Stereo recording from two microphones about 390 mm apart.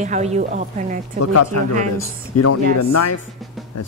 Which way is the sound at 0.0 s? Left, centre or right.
Centre.